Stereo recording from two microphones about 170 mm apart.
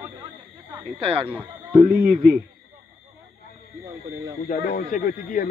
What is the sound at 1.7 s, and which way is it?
Speech, 50° right (ahead or behind).